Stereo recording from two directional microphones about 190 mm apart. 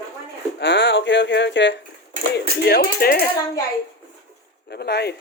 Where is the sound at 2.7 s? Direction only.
55° left (ahead or behind).